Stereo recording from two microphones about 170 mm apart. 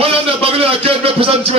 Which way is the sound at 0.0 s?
35° right (ahead or behind).